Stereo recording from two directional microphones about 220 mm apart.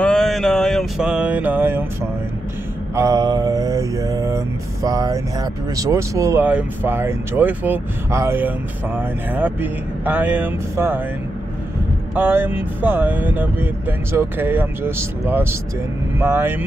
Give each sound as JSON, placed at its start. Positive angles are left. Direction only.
{"t": 0.0, "sound": "mantra", "side_deg": 0}
{"t": 3.0, "sound": "speech", "side_deg": -15}
{"t": 12.2, "sound": "speech", "side_deg": -10}